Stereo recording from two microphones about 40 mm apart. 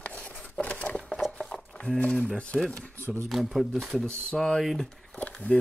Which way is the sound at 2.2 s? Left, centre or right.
Left.